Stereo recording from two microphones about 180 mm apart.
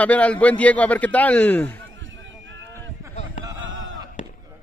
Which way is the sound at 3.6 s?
90° right.